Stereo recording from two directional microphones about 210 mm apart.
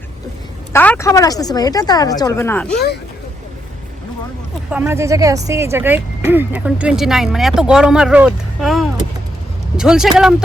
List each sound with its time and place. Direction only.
0.7 s a woman's voice: 10° left (ahead or behind)
4.7 s speech: 10° right (ahead or behind)